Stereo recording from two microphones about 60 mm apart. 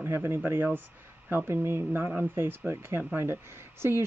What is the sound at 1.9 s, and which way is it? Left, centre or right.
Speech, right.